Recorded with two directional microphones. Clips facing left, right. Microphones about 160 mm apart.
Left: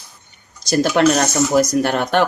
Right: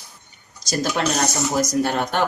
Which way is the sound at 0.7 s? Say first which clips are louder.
Left 8 dB; 65° left (ahead or behind).